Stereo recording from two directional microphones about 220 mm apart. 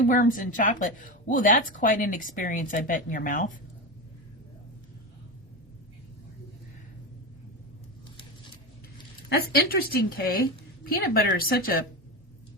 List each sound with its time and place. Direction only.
0.0 s a woman's voice: 35° left (ahead or behind)
9.3 s a woman's voice: 45° left (ahead or behind)